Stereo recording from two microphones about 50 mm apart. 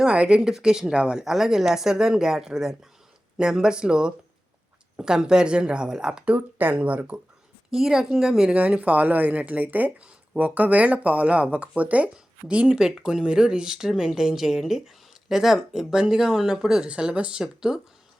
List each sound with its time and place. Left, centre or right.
0.0 s speech: right
6.3 s speech: right
7.7 s speech: centre
8.5 s speech: right
17.4 s speech: centre